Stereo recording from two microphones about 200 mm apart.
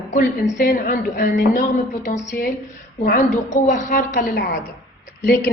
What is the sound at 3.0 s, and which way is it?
A woman's voice, 40° left (ahead or behind).